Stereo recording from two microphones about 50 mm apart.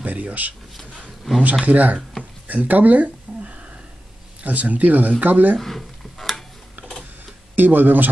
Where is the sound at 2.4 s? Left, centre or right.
Right.